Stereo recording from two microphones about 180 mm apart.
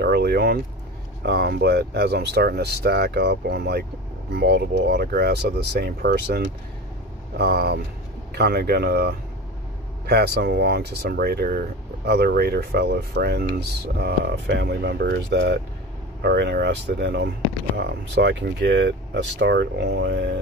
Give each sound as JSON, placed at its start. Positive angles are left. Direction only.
{"t": 0.0, "sound": "speech", "side_deg": -65}